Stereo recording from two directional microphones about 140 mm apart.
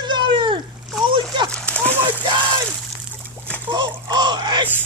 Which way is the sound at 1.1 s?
35° right (ahead or behind).